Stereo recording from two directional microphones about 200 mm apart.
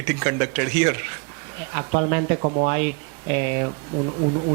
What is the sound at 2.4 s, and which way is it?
Speech, 30° right (ahead or behind).